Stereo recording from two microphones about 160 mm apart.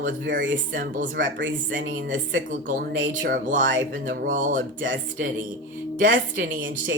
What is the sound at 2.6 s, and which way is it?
Speech, 60° right (ahead or behind).